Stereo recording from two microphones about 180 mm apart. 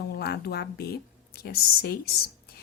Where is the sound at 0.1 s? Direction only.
60° left (ahead or behind).